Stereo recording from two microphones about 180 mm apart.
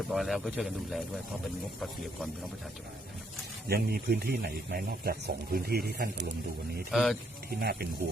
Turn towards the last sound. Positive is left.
turn(degrees=-60)  # may be behind; listen again after turning